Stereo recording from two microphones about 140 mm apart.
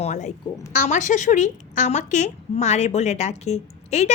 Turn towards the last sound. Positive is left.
turn(degrees=50)  # may be behind; listen again after turning